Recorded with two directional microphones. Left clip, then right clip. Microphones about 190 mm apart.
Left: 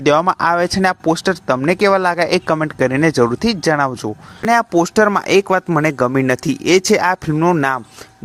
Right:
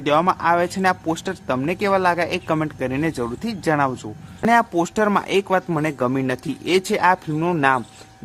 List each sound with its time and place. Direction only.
0.0 s speech: 40° left (ahead or behind)
7.3 s speech: 20° left (ahead or behind)